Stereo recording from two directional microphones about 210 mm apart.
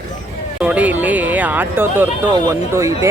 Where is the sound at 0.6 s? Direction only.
5° right (ahead or behind).